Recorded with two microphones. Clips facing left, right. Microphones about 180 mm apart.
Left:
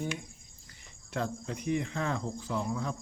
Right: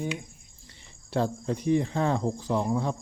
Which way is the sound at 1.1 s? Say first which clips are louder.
Right 7 dB; 35° right (ahead or behind).